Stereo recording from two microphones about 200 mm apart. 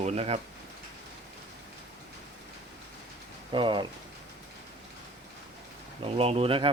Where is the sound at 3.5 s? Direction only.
25° right (ahead or behind).